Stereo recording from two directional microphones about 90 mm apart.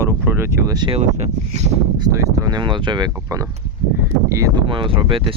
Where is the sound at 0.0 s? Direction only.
30° right (ahead or behind).